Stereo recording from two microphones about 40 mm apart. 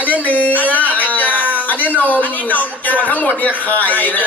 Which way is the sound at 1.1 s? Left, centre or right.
Left.